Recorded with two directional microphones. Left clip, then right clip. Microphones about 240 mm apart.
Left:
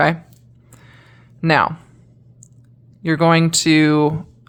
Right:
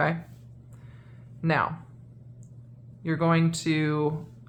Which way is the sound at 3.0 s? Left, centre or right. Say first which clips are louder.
Left 11 dB; left.